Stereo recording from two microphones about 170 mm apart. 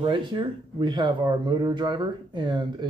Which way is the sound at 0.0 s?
30° right (ahead or behind).